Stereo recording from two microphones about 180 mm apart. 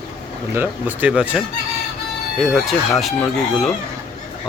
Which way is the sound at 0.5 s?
10° right (ahead or behind).